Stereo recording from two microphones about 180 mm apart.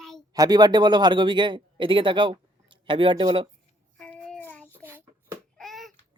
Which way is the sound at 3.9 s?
5° left (ahead or behind).